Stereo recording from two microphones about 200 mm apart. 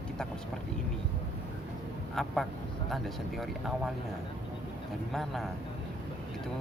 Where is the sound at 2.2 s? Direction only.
Centre (ahead or behind).